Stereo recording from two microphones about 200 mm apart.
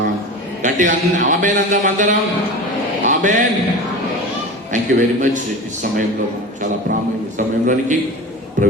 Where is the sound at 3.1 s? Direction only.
40° right (ahead or behind).